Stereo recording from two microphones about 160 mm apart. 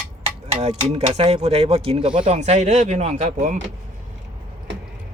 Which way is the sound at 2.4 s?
45° right (ahead or behind).